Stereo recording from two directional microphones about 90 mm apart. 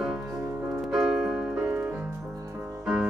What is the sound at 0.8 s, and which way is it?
Keyboard, 5° right (ahead or behind).